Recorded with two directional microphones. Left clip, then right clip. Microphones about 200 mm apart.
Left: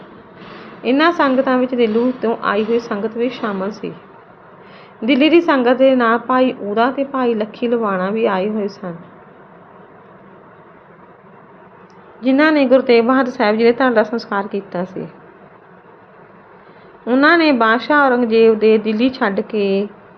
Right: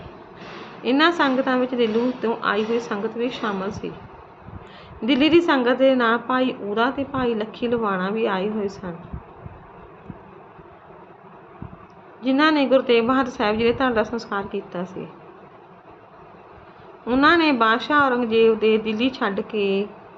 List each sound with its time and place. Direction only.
0.8 s a woman's voice: 15° left (ahead or behind)
4.9 s a woman's voice: 15° left (ahead or behind)
12.2 s speech: 20° left (ahead or behind)
17.1 s speech: 20° left (ahead or behind)